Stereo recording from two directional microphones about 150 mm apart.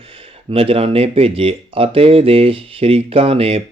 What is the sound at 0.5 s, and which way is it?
Speech, 40° right (ahead or behind).